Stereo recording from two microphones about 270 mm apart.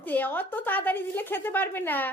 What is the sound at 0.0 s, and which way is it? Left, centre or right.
A woman's voice, centre.